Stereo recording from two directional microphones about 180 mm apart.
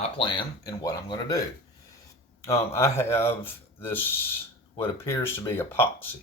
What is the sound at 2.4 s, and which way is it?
Speech, 15° left (ahead or behind).